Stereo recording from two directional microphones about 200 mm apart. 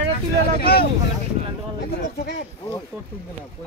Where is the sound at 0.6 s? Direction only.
50° left (ahead or behind).